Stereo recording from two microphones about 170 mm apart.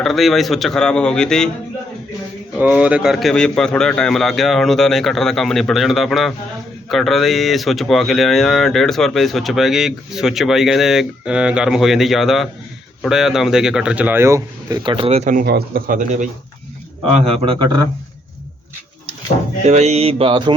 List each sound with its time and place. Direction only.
0.0 s speech: centre (ahead or behind)
2.6 s speech: 10° right (ahead or behind)
14.8 s mantra: 35° right (ahead or behind)
15.4 s speech: 65° right (ahead or behind); by 16.3 s 50° right (ahead or behind)
19.6 s mantra: 40° right (ahead or behind)